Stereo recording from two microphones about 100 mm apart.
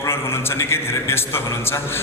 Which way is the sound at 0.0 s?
25° left (ahead or behind).